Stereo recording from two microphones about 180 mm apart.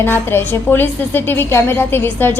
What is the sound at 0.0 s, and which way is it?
A woman's voice, 10° left (ahead or behind).